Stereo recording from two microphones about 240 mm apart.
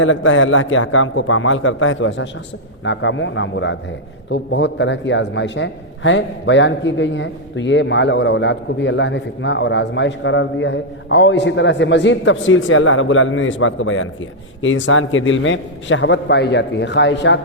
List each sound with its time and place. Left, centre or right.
0.0 s a man's voice: left